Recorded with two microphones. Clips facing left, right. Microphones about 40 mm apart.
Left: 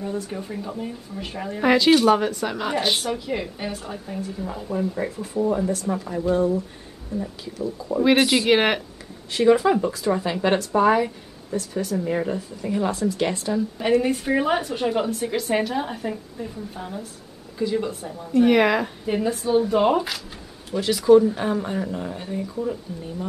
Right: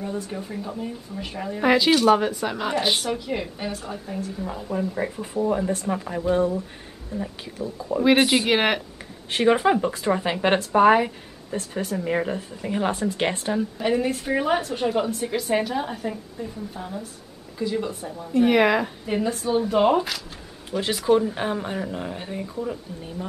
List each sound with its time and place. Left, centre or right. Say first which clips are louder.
0.0 s speech: left 1 dB; centre
5.1 s speech: left 1 dB; right
5.7 s speech: even; right
5.9 s speech: even; right
7.2 s speech: left 1 dB; right
8.2 s speech: even; centre
8.5 s speech: left 2 dB; centre
9.3 s speech: left 2 dB; right
13.7 s speech: left 5 dB; centre
20.8 s speech: left 6 dB; right
22.6 s speech: left 2 dB; centre